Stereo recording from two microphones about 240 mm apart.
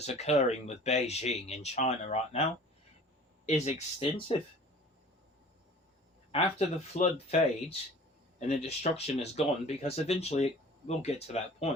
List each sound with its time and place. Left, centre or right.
0.0 s speech: left
3.4 s speech: left
6.3 s speech: left